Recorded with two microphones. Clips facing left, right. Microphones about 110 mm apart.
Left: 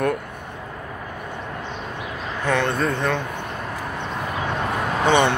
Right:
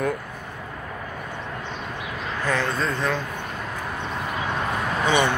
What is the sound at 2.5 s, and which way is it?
Speech, 65° left (ahead or behind).